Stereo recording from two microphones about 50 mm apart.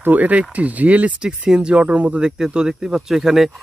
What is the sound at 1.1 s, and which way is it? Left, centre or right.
Speech, centre.